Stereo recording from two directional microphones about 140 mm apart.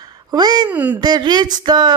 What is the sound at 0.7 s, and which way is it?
Speech, 10° right (ahead or behind).